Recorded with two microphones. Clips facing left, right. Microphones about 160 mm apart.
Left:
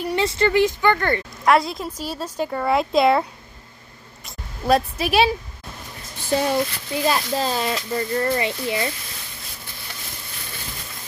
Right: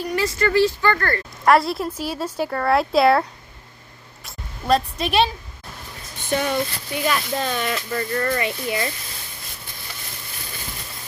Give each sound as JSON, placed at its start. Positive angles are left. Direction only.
{"t": 0.0, "sound": "speech", "side_deg": 25}
{"t": 1.5, "sound": "a woman's voice", "side_deg": 0}
{"t": 2.5, "sound": "speech", "side_deg": 5}
{"t": 4.3, "sound": "speech", "side_deg": 5}
{"t": 6.2, "sound": "speech", "side_deg": 30}